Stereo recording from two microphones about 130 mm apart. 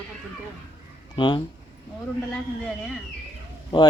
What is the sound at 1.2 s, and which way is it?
Speech, 40° left (ahead or behind).